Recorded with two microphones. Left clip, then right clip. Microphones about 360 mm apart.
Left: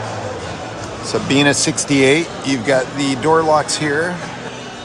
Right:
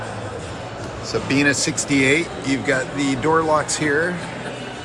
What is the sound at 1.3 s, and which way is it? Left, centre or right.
Speech, centre.